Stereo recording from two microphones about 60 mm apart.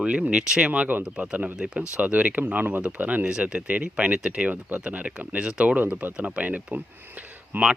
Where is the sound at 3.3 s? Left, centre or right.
Centre.